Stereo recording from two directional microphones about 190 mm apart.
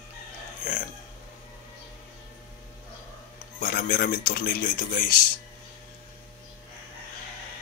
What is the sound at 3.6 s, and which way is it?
Speech, 50° left (ahead or behind).